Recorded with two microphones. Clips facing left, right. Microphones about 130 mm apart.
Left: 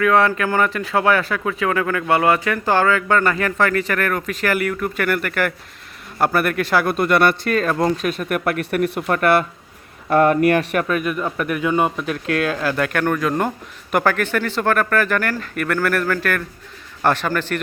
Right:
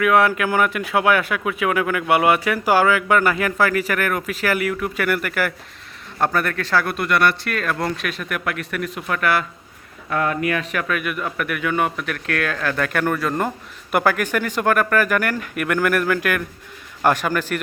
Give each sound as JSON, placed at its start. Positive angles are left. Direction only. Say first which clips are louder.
{"t": 0.0, "sound": "speech", "louder": "even", "side_deg": -10}
{"t": 6.1, "sound": "a man's voice", "louder": "left 3 dB", "side_deg": 5}
{"t": 6.9, "sound": "speech", "louder": "left 3 dB", "side_deg": 45}
{"t": 7.5, "sound": "speech", "louder": "left 5 dB", "side_deg": 30}
{"t": 10.8, "sound": "speech", "louder": "left 4 dB", "side_deg": 35}
{"t": 12.6, "sound": "a man's voice", "louder": "left 2 dB", "side_deg": 5}
{"t": 13.0, "sound": "speech", "louder": "left 1 dB", "side_deg": -5}